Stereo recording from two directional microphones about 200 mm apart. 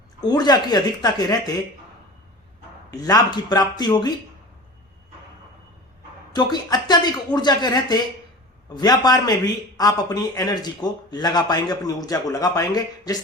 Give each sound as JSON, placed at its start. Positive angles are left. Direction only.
{"t": 0.2, "sound": "a man's voice", "side_deg": 20}
{"t": 2.9, "sound": "a man's voice", "side_deg": 20}
{"t": 6.3, "sound": "a man's voice", "side_deg": 20}